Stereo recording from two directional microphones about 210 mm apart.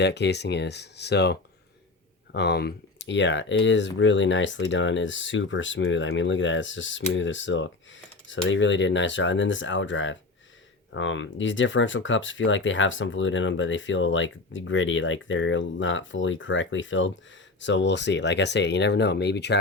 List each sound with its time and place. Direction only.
0.0 s speech: 55° left (ahead or behind)